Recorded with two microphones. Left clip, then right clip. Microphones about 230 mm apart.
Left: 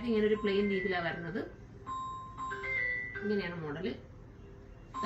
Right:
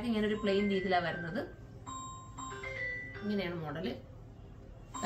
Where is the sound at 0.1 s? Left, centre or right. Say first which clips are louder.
Left 3 dB; centre.